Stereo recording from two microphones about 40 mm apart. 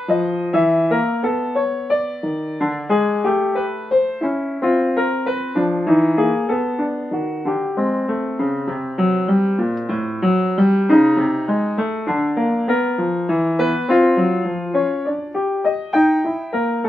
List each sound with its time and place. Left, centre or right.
0.1 s music: centre
12.8 s music: centre
13.3 s music: centre